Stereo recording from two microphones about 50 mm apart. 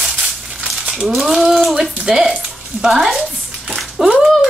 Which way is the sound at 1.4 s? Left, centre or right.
Centre.